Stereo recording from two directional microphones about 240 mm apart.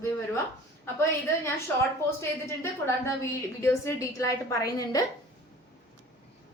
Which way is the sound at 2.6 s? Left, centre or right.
Centre.